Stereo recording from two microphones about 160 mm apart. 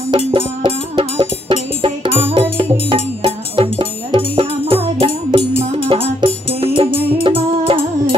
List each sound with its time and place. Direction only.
0.3 s music: 35° right (ahead or behind)